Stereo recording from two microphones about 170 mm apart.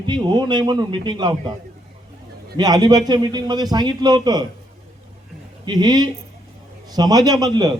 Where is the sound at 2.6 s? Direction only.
25° right (ahead or behind).